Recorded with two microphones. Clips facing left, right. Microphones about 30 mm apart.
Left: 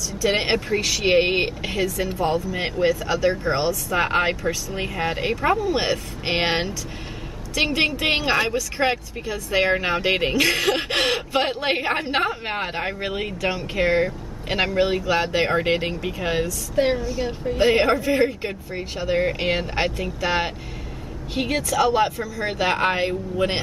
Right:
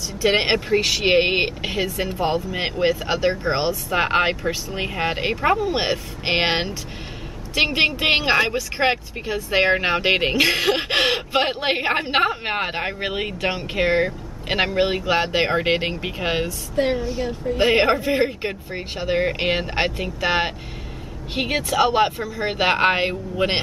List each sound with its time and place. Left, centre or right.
0.2 s a woman's voice: right
16.8 s a woman's voice: centre
17.6 s speech: right